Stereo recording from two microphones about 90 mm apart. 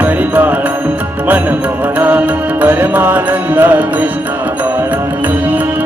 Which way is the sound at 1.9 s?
15° right (ahead or behind).